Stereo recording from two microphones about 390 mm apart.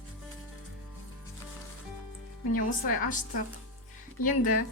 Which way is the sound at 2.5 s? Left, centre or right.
Left.